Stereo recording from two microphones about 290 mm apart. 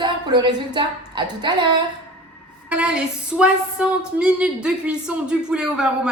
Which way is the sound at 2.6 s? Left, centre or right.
Centre.